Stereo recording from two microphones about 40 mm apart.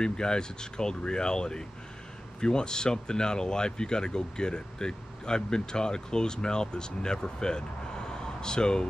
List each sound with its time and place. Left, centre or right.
0.0 s speech: centre